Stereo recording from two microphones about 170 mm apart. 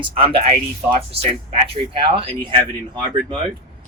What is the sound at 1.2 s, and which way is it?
Speech, 35° right (ahead or behind).